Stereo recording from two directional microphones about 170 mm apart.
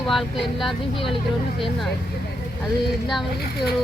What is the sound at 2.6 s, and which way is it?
A woman's voice, centre (ahead or behind).